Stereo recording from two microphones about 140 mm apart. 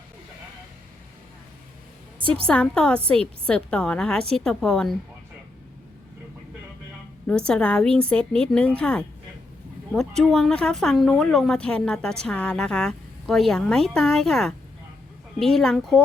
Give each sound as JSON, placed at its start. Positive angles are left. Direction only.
{"t": 2.2, "sound": "a woman's voice", "side_deg": -40}
{"t": 2.5, "sound": "a woman's voice", "side_deg": 5}
{"t": 7.3, "sound": "speech", "side_deg": 5}
{"t": 10.2, "sound": "a woman's voice", "side_deg": 5}